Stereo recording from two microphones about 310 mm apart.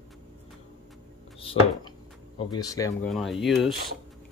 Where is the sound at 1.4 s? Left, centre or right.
Centre.